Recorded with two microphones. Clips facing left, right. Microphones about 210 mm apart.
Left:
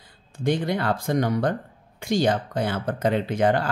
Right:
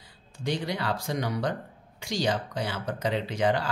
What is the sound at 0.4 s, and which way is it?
Speech, 50° left (ahead or behind).